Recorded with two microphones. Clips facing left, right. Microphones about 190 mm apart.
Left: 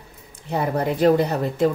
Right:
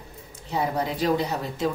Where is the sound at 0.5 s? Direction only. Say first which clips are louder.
Left 4 dB; 55° left (ahead or behind).